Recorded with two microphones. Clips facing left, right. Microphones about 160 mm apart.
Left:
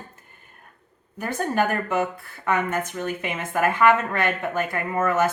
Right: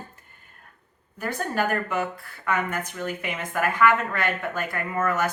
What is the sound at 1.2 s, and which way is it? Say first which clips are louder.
A woman's voice: left 3 dB; 20° left (ahead or behind).